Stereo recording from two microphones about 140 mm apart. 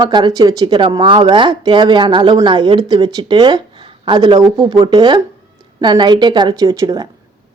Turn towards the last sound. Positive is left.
turn(degrees=-25)  # may be behind; listen again after turning